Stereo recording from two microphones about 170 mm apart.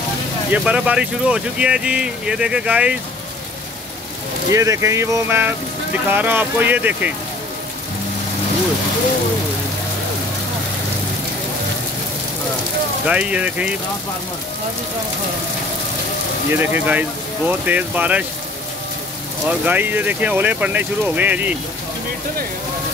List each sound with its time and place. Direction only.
0.5 s speech: 10° right (ahead or behind)
4.5 s speech: 20° right (ahead or behind)
13.0 s speech: 5° right (ahead or behind)
16.5 s speech: 10° right (ahead or behind)
19.6 s speech: 10° right (ahead or behind)